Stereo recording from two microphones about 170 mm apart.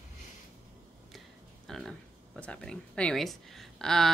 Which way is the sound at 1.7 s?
Centre (ahead or behind).